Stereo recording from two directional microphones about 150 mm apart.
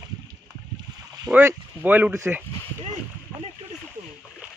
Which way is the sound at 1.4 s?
15° right (ahead or behind).